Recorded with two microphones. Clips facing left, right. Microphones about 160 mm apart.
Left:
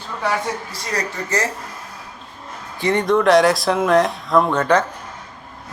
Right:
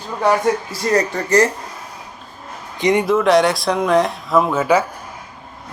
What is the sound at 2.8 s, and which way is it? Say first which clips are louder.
Speech: right 3 dB; 15° right (ahead or behind).